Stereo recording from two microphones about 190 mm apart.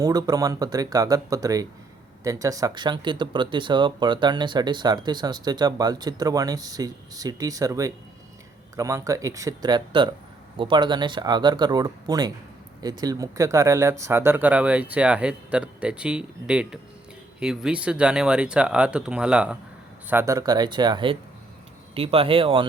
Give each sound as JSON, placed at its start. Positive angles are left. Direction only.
{"t": 0.0, "sound": "speech", "side_deg": -20}